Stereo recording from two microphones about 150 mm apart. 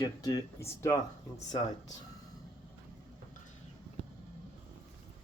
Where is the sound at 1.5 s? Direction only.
30° left (ahead or behind).